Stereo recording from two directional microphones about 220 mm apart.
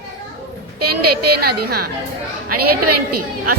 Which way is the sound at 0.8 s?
90° right.